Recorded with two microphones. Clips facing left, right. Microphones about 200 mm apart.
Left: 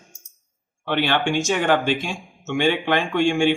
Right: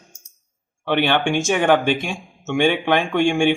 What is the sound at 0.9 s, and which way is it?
Speech, 60° right (ahead or behind).